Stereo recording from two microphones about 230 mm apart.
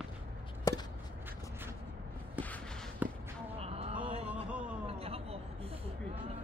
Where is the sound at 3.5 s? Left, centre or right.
Right.